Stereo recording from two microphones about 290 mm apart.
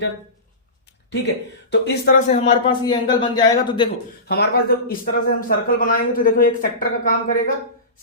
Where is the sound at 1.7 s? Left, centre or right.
Left.